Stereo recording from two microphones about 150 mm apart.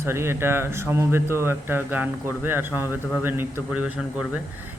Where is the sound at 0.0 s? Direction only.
15° right (ahead or behind).